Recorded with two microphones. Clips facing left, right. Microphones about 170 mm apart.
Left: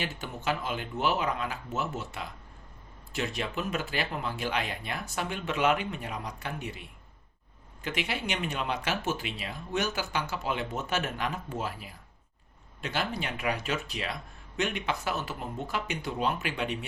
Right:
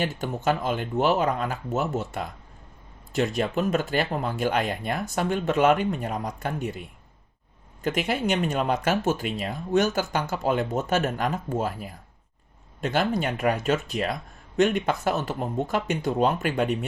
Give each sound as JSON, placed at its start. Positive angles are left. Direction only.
{"t": 0.0, "sound": "speech", "side_deg": -45}